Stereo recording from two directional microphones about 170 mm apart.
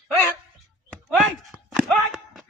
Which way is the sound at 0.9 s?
5° left (ahead or behind).